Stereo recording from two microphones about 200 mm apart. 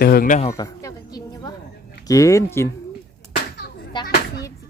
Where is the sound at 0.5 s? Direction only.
15° left (ahead or behind).